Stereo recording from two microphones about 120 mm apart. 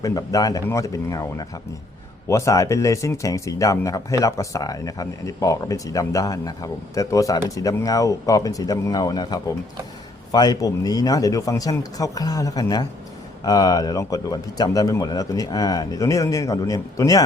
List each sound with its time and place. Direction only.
0.0 s a man's voice: 30° left (ahead or behind)